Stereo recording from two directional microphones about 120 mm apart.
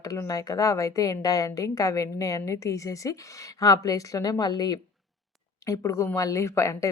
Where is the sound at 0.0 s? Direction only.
30° left (ahead or behind).